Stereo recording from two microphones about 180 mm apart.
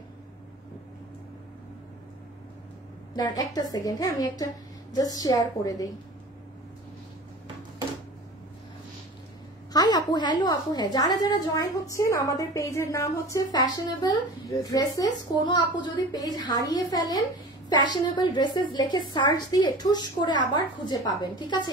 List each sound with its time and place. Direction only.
3.2 s a woman's voice: 20° left (ahead or behind)
9.7 s a woman's voice: 20° left (ahead or behind)